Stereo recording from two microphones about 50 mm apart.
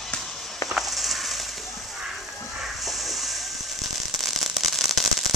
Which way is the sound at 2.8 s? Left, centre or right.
Centre.